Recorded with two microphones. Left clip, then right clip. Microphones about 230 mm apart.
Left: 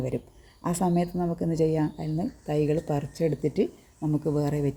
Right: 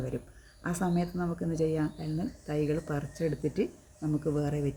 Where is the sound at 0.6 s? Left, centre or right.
Left.